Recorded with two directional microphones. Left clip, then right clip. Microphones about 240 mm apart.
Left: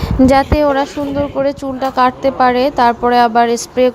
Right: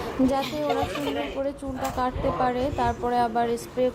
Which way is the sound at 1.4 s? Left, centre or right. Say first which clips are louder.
Left 13 dB; left.